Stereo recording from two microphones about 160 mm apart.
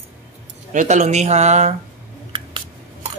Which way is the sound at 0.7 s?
45° right (ahead or behind).